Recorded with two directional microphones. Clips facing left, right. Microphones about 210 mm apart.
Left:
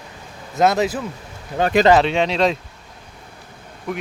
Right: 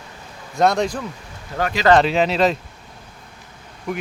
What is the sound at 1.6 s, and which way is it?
Speech, 20° left (ahead or behind).